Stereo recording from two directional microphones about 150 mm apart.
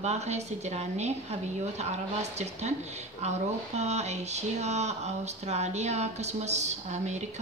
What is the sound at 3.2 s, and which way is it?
Speech, 45° right (ahead or behind).